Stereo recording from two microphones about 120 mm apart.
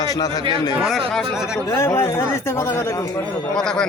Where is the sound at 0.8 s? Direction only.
Centre (ahead or behind).